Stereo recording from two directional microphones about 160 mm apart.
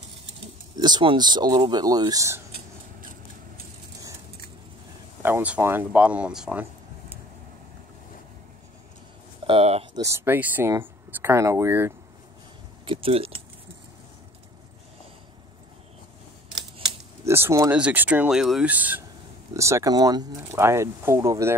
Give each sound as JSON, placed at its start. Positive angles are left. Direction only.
{"t": 0.7, "sound": "speech", "side_deg": -25}
{"t": 5.2, "sound": "speech", "side_deg": -10}
{"t": 9.5, "sound": "speech", "side_deg": -40}
{"t": 9.9, "sound": "speech", "side_deg": -15}
{"t": 12.8, "sound": "a sound", "side_deg": -35}
{"t": 17.2, "sound": "a sound", "side_deg": -15}
{"t": 17.7, "sound": "speech", "side_deg": -10}